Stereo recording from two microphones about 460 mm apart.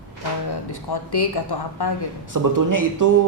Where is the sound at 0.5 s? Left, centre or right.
Left.